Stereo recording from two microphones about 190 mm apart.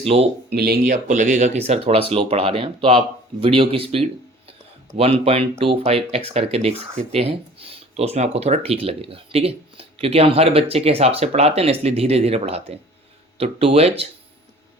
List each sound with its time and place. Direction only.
0.0 s speech: 35° right (ahead or behind)
0.5 s speech: 55° right (ahead or behind)
1.0 s speech: 40° right (ahead or behind)
5.2 s speech: 30° right (ahead or behind)